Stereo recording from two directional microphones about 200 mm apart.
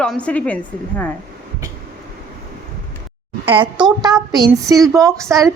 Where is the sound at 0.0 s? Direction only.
5° left (ahead or behind).